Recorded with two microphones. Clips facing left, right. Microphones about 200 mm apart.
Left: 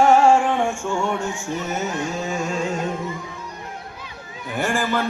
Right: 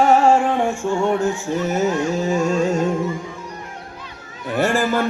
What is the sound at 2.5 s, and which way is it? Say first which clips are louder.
Carnatic music: right 6 dB; 45° right (ahead or behind).